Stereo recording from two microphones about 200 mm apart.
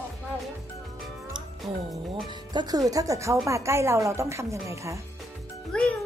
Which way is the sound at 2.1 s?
20° right (ahead or behind).